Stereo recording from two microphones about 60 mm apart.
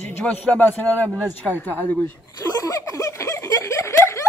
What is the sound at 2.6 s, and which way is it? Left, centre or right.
Snicker, left.